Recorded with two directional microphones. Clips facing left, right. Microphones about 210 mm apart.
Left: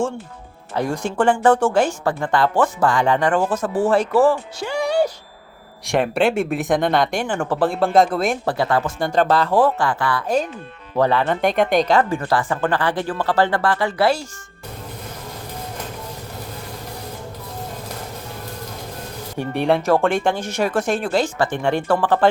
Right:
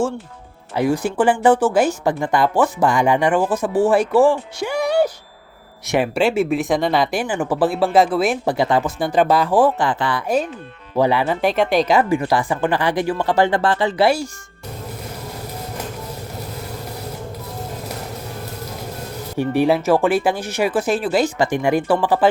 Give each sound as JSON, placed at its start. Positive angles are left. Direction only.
{"t": 0.8, "sound": "speech", "side_deg": -5}
{"t": 8.4, "sound": "speech", "side_deg": -15}
{"t": 19.4, "sound": "speech", "side_deg": -5}